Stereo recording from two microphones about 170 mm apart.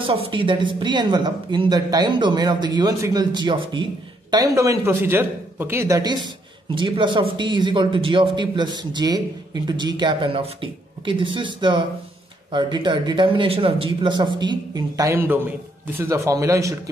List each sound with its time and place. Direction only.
0.0 s speech: 30° right (ahead or behind)